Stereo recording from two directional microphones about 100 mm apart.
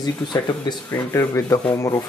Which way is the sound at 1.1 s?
35° left (ahead or behind).